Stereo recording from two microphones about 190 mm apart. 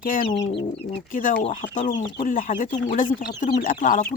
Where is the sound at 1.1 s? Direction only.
45° left (ahead or behind).